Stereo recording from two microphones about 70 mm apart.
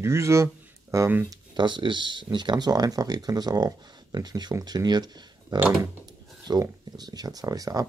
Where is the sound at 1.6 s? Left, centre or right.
Right.